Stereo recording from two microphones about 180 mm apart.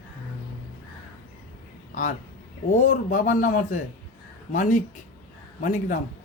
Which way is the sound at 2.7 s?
45° left (ahead or behind).